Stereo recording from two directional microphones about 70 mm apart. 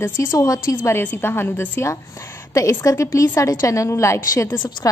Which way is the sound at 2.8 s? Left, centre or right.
Left.